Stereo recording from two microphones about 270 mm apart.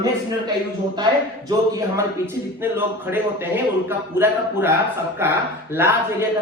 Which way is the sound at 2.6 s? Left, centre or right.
Centre.